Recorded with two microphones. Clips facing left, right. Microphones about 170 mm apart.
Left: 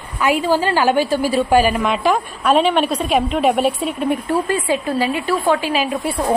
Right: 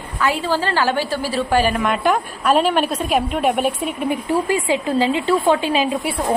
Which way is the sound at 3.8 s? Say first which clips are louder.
Left 2 dB; 10° right (ahead or behind).